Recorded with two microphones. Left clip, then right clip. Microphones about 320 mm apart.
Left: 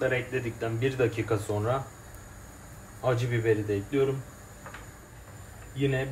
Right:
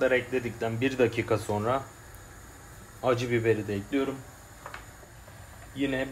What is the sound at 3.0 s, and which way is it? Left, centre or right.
Speech, right.